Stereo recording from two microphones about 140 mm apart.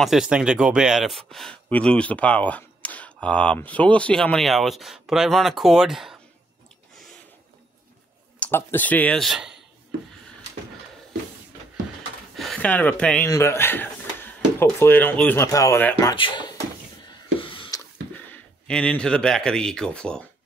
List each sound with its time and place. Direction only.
0.0 s speech: 5° right (ahead or behind)
8.4 s speech: 15° left (ahead or behind); by 9.6 s 5° right (ahead or behind)
12.4 s speech: 5° left (ahead or behind)
16.2 s speech: 35° left (ahead or behind)
17.4 s a sound: 40° left (ahead or behind)
18.3 s speech: 5° left (ahead or behind)